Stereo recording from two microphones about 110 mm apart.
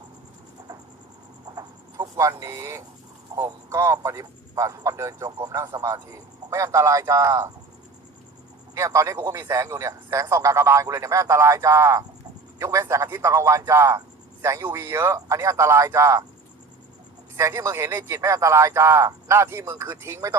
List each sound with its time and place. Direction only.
1.5 s a sound: 35° right (ahead or behind)
3.3 s speech: 30° right (ahead or behind)
8.7 s speech: 25° right (ahead or behind)
17.3 s speech: 30° right (ahead or behind)